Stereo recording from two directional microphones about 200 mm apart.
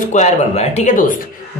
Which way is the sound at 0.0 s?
35° left (ahead or behind).